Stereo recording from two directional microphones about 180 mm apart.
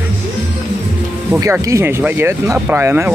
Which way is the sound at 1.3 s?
15° right (ahead or behind).